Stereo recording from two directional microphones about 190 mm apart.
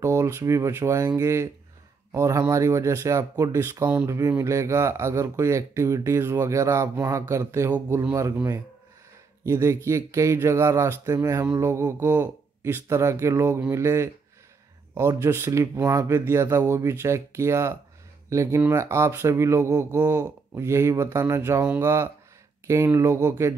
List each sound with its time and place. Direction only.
0.0 s speech: 15° right (ahead or behind)